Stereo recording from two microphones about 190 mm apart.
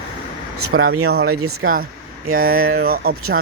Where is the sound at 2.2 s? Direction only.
90° right.